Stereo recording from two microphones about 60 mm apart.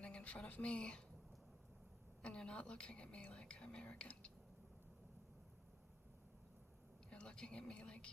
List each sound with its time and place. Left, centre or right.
0.0 s speech: centre
2.2 s a woman's voice: centre
7.1 s a woman's voice: centre